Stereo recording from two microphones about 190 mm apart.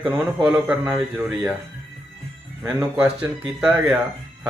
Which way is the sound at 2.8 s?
20° right (ahead or behind).